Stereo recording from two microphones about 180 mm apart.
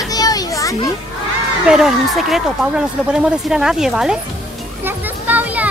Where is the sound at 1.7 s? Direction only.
Centre (ahead or behind).